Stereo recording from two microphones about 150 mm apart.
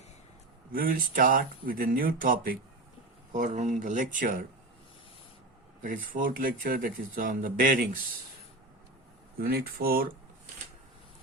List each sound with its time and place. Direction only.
0.7 s speech: 70° right (ahead or behind)
3.3 s speech: 55° right (ahead or behind)
5.8 s speech: 60° right (ahead or behind)
9.4 s speech: 90° right